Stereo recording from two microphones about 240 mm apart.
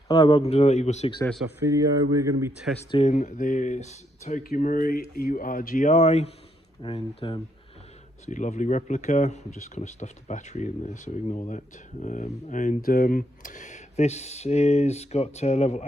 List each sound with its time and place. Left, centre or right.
0.1 s speech: left
1.5 s speech: centre
2.9 s speech: left